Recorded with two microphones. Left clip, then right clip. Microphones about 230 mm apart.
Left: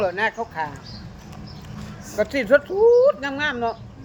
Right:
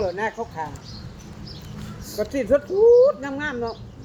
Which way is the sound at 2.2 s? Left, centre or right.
Left.